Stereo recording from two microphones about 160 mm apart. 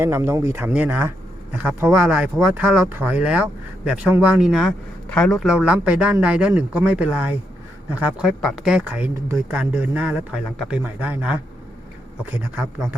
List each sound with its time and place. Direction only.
0.0 s speech: 15° right (ahead or behind)